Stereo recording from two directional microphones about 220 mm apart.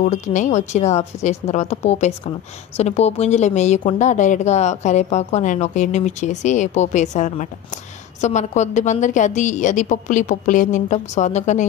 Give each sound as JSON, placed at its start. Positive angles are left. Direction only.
{"t": 0.0, "sound": "a woman's voice", "side_deg": 35}